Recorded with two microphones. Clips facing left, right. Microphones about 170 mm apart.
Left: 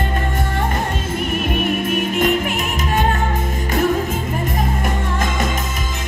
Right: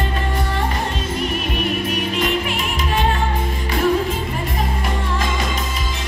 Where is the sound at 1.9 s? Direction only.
50° left (ahead or behind).